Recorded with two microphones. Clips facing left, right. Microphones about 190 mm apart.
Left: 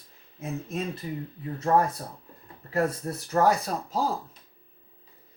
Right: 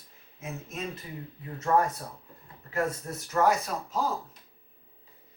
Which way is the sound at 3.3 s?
35° left (ahead or behind).